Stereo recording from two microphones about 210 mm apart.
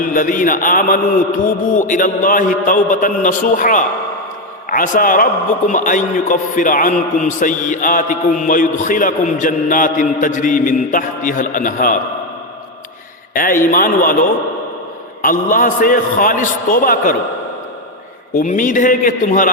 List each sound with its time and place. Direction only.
0.0 s a man's voice: 40° left (ahead or behind)
13.3 s a man's voice: 40° left (ahead or behind)
18.3 s a man's voice: 40° left (ahead or behind)